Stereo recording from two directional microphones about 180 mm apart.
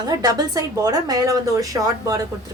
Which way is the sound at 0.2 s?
20° right (ahead or behind).